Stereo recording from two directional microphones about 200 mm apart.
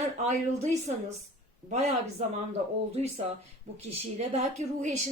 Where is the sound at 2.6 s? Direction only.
35° right (ahead or behind).